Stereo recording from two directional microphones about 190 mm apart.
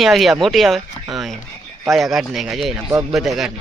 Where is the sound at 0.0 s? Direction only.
Centre (ahead or behind).